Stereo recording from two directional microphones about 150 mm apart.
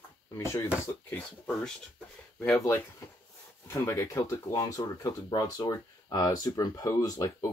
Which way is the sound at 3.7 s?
20° left (ahead or behind).